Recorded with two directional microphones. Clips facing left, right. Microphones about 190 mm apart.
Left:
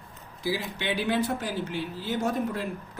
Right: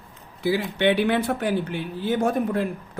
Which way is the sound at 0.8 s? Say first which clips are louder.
Right 7 dB; 65° right (ahead or behind).